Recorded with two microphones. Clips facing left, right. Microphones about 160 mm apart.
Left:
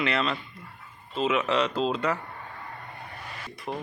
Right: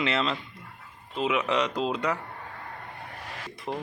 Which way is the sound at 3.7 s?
10° left (ahead or behind).